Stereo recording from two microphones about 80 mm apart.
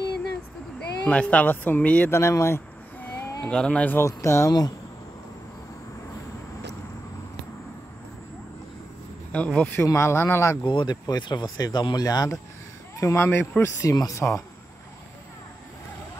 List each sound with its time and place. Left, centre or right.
0.7 s speech: centre
2.0 s speech: left
3.2 s a sound: left
3.4 s speech: centre
4.0 s speech: left
4.5 s speech: left
9.3 s speech: centre
9.8 s speech: left
10.6 s speech: left
13.0 s speech: left
13.8 s speech: left